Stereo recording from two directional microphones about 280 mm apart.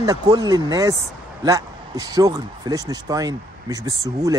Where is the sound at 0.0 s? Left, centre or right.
Centre.